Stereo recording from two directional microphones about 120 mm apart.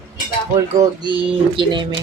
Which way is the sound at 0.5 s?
30° right (ahead or behind).